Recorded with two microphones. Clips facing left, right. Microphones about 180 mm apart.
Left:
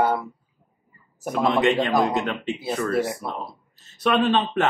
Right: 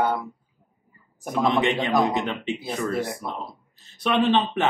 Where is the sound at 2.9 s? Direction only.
5° left (ahead or behind).